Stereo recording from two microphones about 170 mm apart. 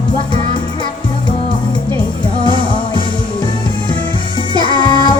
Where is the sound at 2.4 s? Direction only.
25° left (ahead or behind).